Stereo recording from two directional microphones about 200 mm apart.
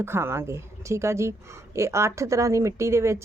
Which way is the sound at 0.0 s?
10° right (ahead or behind).